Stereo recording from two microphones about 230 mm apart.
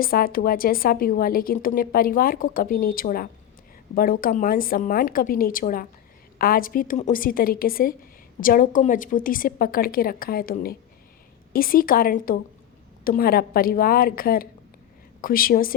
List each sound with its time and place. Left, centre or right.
0.0 s a woman's voice: left